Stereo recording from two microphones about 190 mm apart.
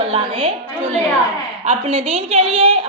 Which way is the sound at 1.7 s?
30° right (ahead or behind).